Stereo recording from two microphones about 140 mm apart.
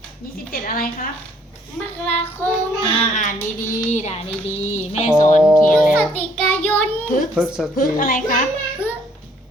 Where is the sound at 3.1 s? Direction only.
65° left (ahead or behind).